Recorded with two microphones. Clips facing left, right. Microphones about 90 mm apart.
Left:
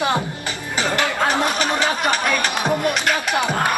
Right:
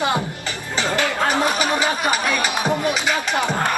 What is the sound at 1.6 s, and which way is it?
Speech, 10° right (ahead or behind).